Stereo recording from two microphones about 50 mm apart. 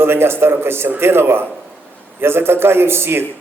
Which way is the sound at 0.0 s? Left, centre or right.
Right.